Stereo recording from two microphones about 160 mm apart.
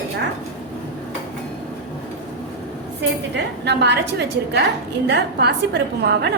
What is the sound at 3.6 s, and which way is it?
A woman's voice, 90° right.